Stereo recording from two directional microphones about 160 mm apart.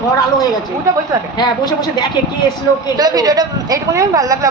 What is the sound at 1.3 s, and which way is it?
Speech, 25° left (ahead or behind).